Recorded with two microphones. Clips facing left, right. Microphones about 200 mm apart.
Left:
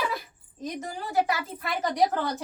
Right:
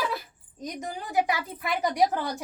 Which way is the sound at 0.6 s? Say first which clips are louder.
Left 1 dB; 15° right (ahead or behind).